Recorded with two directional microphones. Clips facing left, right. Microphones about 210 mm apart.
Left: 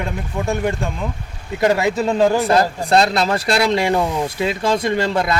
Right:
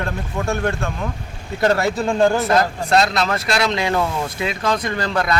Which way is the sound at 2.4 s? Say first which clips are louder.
Left 2 dB; 30° left (ahead or behind).